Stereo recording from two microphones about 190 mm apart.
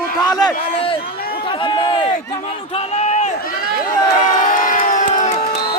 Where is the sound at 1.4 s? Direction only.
25° left (ahead or behind).